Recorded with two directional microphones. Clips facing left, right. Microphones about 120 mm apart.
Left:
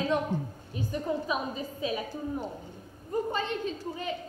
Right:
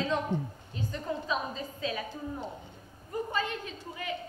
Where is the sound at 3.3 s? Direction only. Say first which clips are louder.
Left 2 dB; 25° left (ahead or behind).